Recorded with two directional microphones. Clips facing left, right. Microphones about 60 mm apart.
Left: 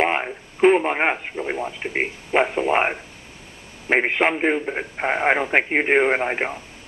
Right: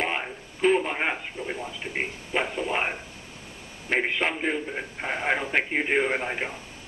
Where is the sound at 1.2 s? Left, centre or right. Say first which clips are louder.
Left 7 dB; left.